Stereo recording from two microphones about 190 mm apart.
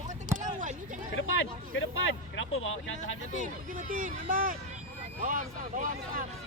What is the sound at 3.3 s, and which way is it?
Speech, 45° right (ahead or behind).